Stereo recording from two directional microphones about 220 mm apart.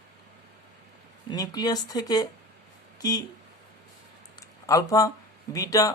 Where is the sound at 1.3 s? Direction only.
20° left (ahead or behind).